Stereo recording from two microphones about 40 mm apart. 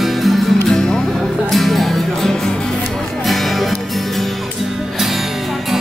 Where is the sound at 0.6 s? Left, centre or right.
Centre.